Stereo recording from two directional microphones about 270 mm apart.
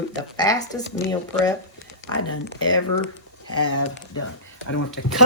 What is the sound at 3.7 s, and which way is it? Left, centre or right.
Speech, left.